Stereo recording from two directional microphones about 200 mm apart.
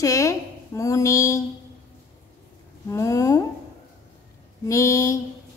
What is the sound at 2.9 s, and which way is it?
Speech, 15° left (ahead or behind).